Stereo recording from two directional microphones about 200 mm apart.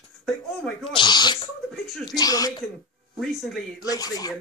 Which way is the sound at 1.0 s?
20° left (ahead or behind).